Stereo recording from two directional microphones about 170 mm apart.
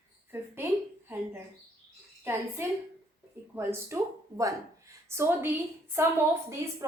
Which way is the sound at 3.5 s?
15° right (ahead or behind).